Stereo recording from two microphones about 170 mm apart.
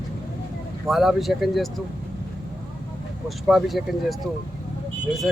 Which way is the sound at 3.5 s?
Centre (ahead or behind).